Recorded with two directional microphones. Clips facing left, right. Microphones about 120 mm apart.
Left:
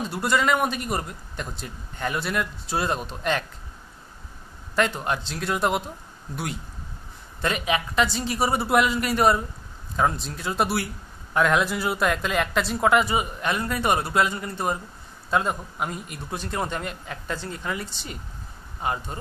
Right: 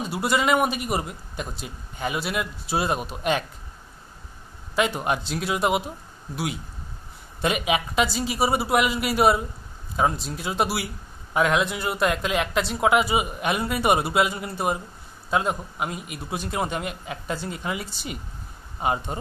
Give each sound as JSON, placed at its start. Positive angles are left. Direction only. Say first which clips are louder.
{"t": 0.0, "sound": "speech", "louder": "even", "side_deg": -10}
{"t": 4.7, "sound": "speech", "louder": "right 1 dB", "side_deg": -10}